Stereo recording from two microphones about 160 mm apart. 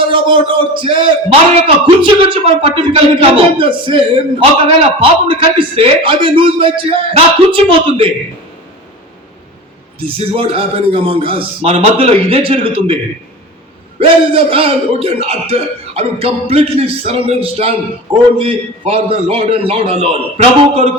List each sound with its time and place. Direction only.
0.1 s a man's voice: 30° right (ahead or behind)
10.0 s a man's voice: 35° right (ahead or behind)
14.0 s a man's voice: 35° right (ahead or behind)